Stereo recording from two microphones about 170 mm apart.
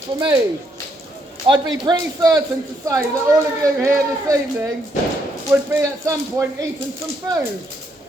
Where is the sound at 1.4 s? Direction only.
30° right (ahead or behind).